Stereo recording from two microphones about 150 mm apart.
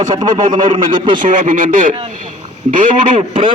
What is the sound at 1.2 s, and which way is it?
Speech, 60° right (ahead or behind).